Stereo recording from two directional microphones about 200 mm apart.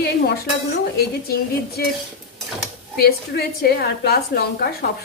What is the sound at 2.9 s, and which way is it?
A woman's voice, 50° left (ahead or behind).